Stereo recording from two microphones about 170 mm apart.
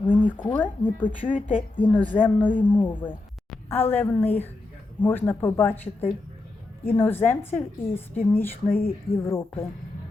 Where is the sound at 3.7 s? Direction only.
10° left (ahead or behind).